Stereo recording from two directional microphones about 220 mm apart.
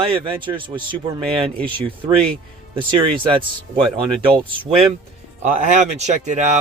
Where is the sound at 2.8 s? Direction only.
20° right (ahead or behind).